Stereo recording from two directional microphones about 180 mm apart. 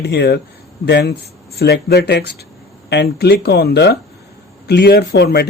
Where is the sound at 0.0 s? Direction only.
65° left (ahead or behind).